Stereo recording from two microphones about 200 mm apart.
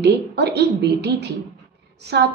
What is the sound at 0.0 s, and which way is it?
A woman's voice, 55° right (ahead or behind).